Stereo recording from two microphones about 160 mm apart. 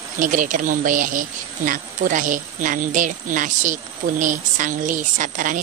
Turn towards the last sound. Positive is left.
turn(degrees=-55)  # may be behind; listen again after turning